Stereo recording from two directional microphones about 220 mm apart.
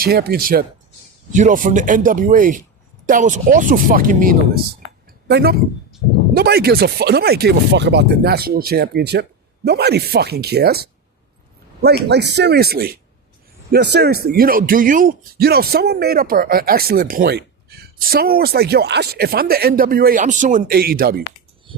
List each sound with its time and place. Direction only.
0.0 s speech: 45° right (ahead or behind)